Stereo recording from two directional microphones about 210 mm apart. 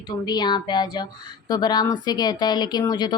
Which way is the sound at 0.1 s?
20° left (ahead or behind).